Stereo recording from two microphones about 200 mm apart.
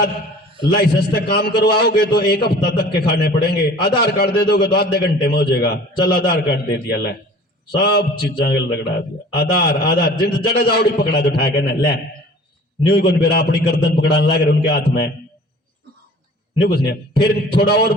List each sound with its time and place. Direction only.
0.8 s a man's voice: 55° left (ahead or behind)
16.6 s a man's voice: 55° left (ahead or behind)